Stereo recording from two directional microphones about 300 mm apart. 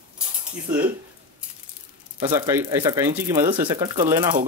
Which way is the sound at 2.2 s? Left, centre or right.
Centre.